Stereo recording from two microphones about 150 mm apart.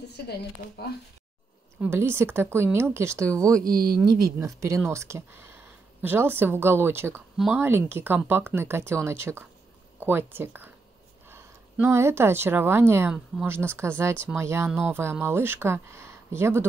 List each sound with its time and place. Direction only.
1.8 s speech: 15° right (ahead or behind)
3.6 s speech: 80° right
4.4 s speech: 20° right (ahead or behind)
7.3 s speech: centre (ahead or behind)
7.6 s a woman's voice: 15° right (ahead or behind)